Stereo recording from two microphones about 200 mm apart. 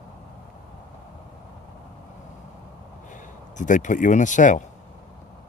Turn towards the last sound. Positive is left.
turn(degrees=40)  # may be behind; listen again after turning